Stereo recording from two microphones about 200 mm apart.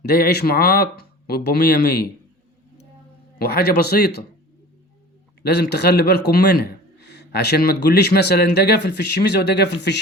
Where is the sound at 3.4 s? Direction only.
50° left (ahead or behind).